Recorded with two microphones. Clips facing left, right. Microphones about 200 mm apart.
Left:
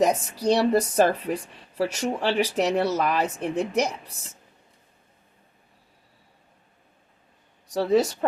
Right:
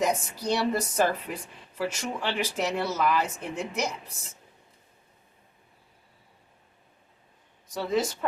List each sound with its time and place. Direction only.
0.0 s speech: 35° left (ahead or behind)
7.7 s speech: 35° left (ahead or behind)